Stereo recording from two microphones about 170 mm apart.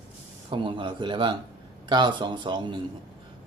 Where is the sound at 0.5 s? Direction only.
30° right (ahead or behind).